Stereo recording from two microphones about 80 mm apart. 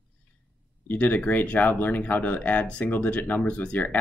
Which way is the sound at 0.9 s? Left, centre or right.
Left.